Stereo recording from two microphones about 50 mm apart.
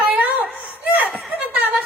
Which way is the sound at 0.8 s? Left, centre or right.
Right.